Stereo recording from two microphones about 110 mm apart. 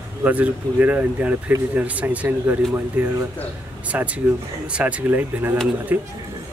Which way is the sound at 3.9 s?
15° right (ahead or behind).